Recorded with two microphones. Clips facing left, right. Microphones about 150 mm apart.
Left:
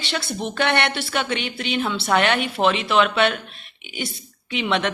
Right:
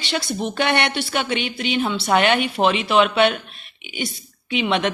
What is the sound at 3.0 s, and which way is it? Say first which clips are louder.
Speech: right 2 dB; 20° right (ahead or behind).